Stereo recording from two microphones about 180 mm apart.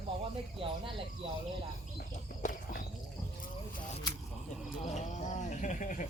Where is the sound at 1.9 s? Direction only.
50° left (ahead or behind).